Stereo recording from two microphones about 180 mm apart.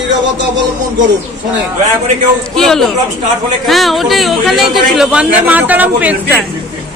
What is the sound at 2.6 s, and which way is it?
Speech, centre (ahead or behind).